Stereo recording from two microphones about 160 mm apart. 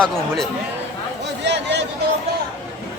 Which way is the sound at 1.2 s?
90° right.